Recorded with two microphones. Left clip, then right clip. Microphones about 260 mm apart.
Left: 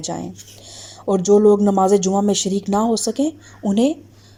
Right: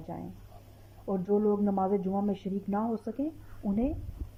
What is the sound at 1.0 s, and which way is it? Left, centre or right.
Speech, left.